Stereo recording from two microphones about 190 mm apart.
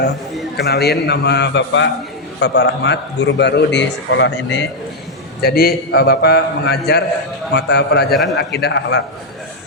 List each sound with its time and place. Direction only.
0.5 s a man's voice: 60° left (ahead or behind)
2.4 s a man's voice: 60° left (ahead or behind)
5.4 s a man's voice: 55° left (ahead or behind)